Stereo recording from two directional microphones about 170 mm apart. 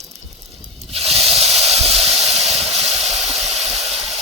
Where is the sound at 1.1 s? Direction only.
Centre (ahead or behind).